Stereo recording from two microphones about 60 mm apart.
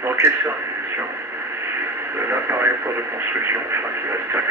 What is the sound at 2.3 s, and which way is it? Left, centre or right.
Radio, right.